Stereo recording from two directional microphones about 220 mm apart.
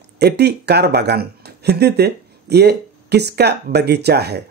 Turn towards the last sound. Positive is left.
turn(degrees=-50)  # may be behind; listen again after turning